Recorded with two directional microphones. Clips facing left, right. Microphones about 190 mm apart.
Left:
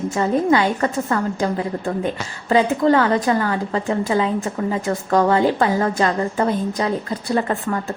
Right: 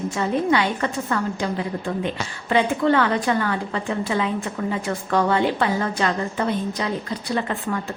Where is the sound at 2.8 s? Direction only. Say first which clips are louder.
Left 3 dB; 40° left (ahead or behind).